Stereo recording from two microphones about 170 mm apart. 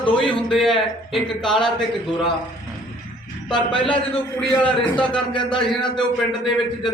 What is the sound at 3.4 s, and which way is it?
Speech, 5° left (ahead or behind).